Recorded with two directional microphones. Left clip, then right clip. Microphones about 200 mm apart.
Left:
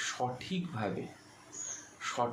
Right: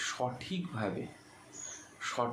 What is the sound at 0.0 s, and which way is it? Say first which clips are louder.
Speech: even; 5° right (ahead or behind).